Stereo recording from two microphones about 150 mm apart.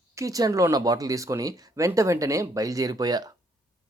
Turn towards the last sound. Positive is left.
turn(degrees=-25)  # may be behind; listen again after turning